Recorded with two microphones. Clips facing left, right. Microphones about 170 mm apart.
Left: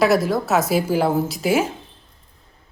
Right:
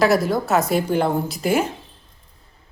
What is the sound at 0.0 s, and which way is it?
A woman's voice, centre (ahead or behind).